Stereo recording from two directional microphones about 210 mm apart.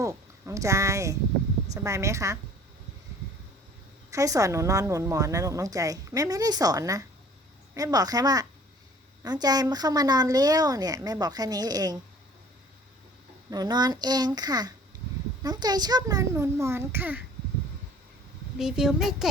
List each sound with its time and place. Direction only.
0.0 s a woman's voice: 15° right (ahead or behind)
4.1 s a woman's voice: 15° right (ahead or behind)
13.5 s a child's voice: 20° right (ahead or behind)
18.5 s speech: centre (ahead or behind)